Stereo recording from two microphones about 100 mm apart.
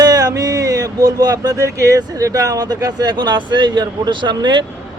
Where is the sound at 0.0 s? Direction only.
40° right (ahead or behind).